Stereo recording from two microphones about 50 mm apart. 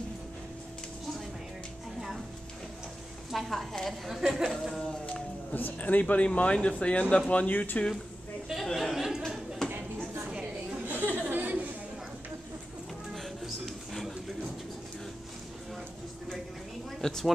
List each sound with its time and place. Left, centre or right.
3.3 s a woman's voice: centre
4.4 s speech: centre
5.0 s music: left
5.6 s speech: left
8.7 s a sound: centre
9.6 s a sound: centre
10.9 s chatter: right
13.1 s a sound: centre
17.0 s speech: centre